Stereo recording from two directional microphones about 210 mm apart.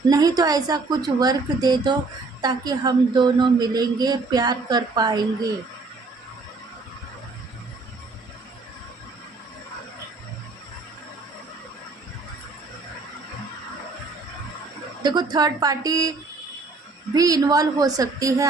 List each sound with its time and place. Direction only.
0.1 s a man's voice: 15° right (ahead or behind)
15.0 s a woman's voice: 20° right (ahead or behind)
17.2 s a woman's voice: 15° right (ahead or behind)